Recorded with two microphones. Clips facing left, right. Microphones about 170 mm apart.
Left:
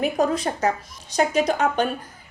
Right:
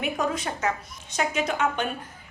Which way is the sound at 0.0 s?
35° left (ahead or behind).